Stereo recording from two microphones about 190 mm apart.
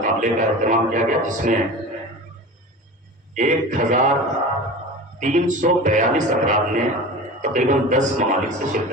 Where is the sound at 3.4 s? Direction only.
40° right (ahead or behind).